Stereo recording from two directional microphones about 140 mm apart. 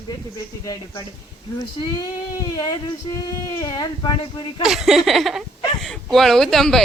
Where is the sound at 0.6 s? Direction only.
30° left (ahead or behind).